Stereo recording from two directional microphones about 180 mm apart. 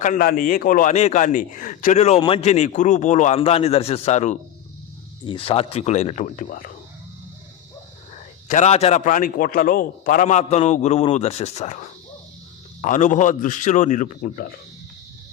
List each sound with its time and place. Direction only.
0.0 s a man's voice: 50° left (ahead or behind)
5.2 s a man's voice: 30° left (ahead or behind); by 6.7 s 50° left (ahead or behind)
8.1 s a man's voice: 40° left (ahead or behind)